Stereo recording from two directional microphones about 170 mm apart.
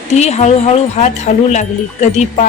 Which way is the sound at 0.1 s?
40° left (ahead or behind).